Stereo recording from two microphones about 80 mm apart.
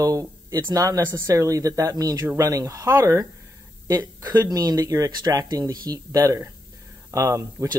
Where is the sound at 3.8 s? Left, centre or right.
Right.